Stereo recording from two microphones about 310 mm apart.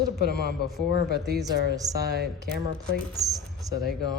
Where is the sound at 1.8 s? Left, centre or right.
Centre.